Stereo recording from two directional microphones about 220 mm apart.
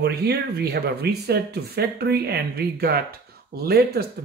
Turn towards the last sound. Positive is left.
turn(degrees=-45)  # may be behind; listen again after turning